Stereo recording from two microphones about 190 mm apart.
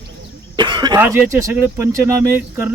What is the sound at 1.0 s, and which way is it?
Speech, 15° right (ahead or behind).